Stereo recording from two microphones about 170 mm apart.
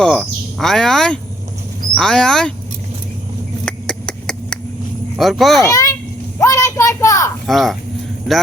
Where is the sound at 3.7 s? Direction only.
5° left (ahead or behind).